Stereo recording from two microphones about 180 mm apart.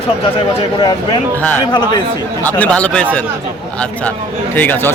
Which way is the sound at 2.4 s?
10° left (ahead or behind).